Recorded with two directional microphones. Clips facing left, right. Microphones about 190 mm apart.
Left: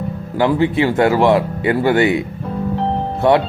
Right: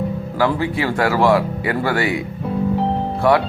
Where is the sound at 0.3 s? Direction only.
20° left (ahead or behind).